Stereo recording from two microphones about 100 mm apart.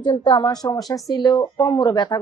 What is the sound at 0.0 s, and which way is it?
A woman's voice, 45° left (ahead or behind).